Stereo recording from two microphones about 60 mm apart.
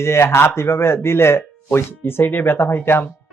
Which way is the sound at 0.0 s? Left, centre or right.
Left.